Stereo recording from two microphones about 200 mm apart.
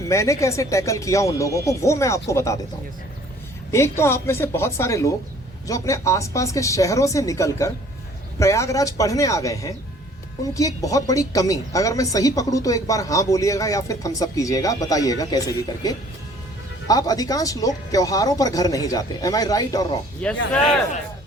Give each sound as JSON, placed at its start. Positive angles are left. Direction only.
{"t": 0.1, "sound": "speech", "side_deg": 15}
{"t": 3.7, "sound": "speech", "side_deg": 15}
{"t": 20.2, "sound": "speech", "side_deg": 5}